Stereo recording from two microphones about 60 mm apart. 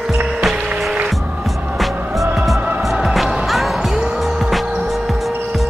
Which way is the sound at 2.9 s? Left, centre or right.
Centre.